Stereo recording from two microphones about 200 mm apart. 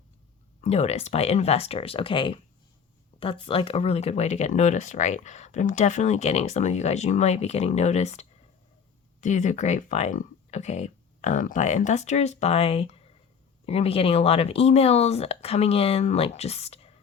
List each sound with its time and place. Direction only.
0.6 s speech: 35° left (ahead or behind)